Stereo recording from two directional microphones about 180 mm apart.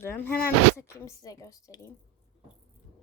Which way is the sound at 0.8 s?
15° left (ahead or behind).